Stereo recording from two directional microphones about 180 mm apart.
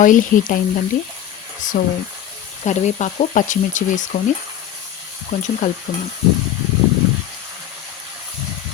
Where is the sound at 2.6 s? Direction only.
40° left (ahead or behind).